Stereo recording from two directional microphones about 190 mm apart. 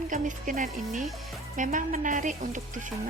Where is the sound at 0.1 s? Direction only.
45° right (ahead or behind).